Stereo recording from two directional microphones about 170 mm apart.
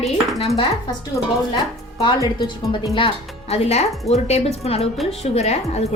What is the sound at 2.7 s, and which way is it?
A woman's voice, 30° left (ahead or behind).